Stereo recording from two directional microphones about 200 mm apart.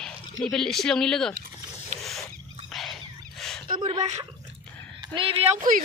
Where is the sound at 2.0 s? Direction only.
Centre (ahead or behind).